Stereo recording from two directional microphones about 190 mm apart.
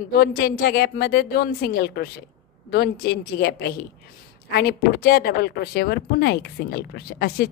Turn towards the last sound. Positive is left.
turn(degrees=55)  # may be behind; listen again after turning